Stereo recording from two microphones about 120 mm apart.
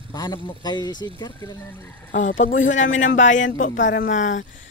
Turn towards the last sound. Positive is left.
turn(degrees=90)